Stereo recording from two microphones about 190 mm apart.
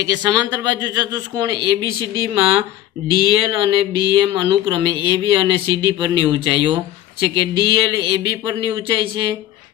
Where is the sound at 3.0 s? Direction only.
55° left (ahead or behind).